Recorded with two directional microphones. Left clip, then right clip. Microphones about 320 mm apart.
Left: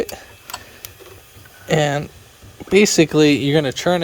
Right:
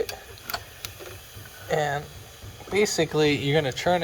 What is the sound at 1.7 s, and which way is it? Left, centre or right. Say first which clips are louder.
Speech: left 7 dB; left.